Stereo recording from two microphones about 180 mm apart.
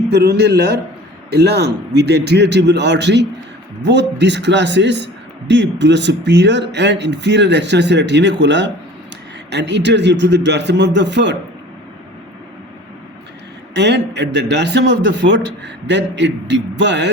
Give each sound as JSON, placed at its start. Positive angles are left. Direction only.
{"t": 0.1, "sound": "a man's voice", "side_deg": -65}
{"t": 13.7, "sound": "a man's voice", "side_deg": -75}